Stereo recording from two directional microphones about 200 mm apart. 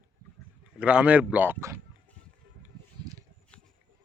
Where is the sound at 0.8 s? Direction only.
5° right (ahead or behind).